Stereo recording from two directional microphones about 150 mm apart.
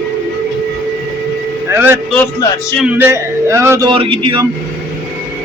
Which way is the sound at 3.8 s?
35° right (ahead or behind).